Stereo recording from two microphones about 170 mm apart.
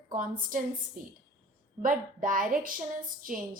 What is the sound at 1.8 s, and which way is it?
A woman's voice, 50° right (ahead or behind).